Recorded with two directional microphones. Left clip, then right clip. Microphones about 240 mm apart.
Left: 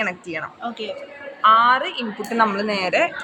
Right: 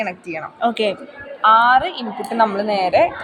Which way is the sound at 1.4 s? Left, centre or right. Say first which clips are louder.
Right 2 dB; centre.